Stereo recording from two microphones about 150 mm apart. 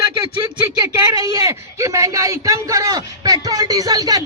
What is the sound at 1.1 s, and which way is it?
A man's voice, 25° right (ahead or behind).